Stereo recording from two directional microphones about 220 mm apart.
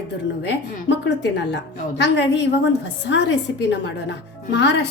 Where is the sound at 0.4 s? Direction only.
55° left (ahead or behind).